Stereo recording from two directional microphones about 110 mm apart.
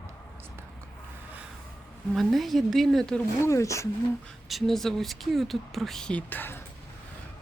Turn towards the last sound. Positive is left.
turn(degrees=20)  # may be behind; listen again after turning